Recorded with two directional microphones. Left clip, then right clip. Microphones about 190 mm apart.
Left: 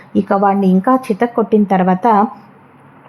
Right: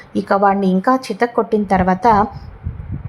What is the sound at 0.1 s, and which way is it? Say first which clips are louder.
A woman's voice: left 1 dB; 15° left (ahead or behind).